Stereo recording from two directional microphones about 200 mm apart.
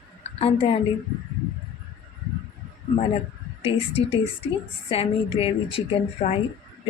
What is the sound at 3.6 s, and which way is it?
A woman's voice, 30° left (ahead or behind).